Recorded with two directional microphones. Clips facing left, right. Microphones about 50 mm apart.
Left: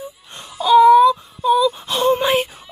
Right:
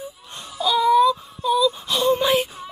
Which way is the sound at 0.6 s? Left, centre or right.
Left.